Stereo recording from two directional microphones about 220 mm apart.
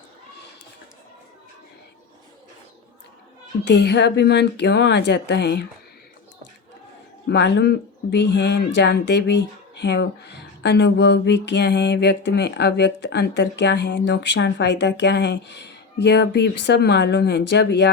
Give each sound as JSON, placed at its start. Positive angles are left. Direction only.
{"t": 3.6, "sound": "speech", "side_deg": 50}
{"t": 7.3, "sound": "speech", "side_deg": 50}